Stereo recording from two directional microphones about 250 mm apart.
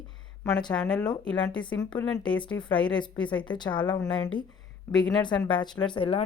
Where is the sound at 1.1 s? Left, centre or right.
Centre.